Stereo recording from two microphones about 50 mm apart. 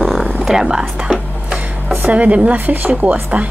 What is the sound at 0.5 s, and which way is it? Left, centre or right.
Music, centre.